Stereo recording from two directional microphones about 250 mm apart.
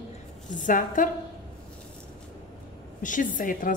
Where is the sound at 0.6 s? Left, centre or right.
Left.